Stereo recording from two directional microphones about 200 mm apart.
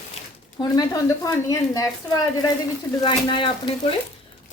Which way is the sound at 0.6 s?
20° left (ahead or behind).